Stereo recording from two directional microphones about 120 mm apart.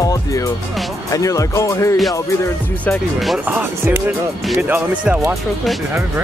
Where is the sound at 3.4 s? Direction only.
15° right (ahead or behind).